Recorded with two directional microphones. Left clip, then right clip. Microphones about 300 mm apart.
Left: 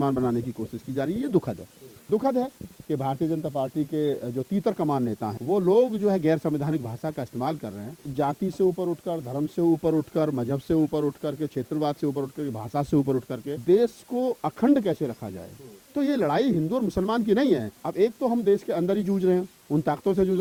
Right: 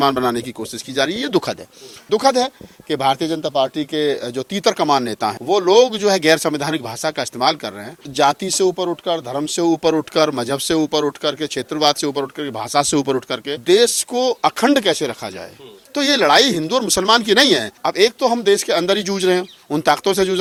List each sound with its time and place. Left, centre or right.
0.0 s speech: centre
8.6 s speech: right
9.2 s speech: centre